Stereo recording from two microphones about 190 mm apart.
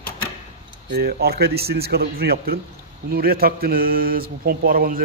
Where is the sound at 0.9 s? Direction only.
55° right (ahead or behind).